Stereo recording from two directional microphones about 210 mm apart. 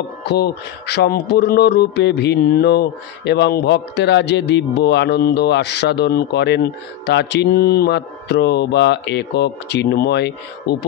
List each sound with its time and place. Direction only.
0.3 s speech: 50° left (ahead or behind)